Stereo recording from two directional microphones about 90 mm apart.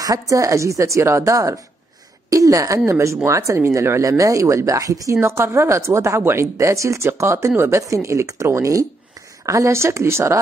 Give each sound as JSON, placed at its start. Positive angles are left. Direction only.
{"t": 0.0, "sound": "speech", "side_deg": -40}